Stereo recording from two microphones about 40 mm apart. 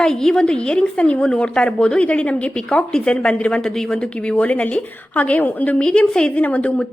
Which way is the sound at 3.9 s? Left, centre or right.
Left.